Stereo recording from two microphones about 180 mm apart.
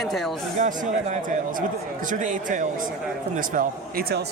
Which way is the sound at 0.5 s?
45° right (ahead or behind).